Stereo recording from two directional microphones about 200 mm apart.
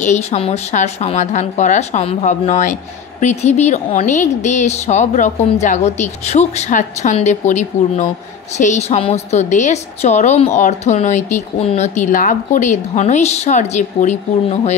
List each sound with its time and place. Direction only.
0.0 s a woman's voice: 35° left (ahead or behind)